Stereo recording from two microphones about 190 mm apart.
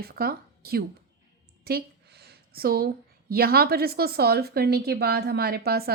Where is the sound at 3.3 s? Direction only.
55° right (ahead or behind).